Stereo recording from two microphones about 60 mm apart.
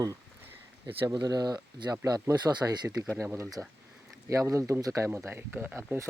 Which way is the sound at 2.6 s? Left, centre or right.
Right.